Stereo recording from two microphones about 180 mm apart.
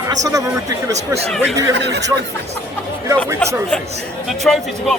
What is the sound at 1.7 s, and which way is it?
Speech, 75° right (ahead or behind).